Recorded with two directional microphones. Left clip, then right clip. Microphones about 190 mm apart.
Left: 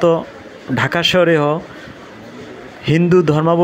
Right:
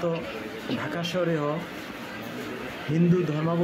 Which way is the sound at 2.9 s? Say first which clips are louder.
Left 13 dB; 45° left (ahead or behind).